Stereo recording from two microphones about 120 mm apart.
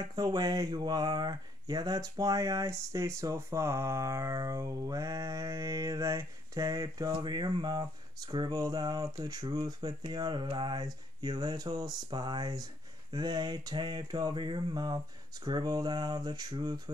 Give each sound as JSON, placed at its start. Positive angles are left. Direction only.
{"t": 0.0, "sound": "speech", "side_deg": -35}